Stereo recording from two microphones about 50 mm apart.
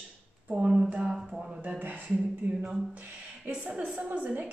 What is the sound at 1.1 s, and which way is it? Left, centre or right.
Speech, centre.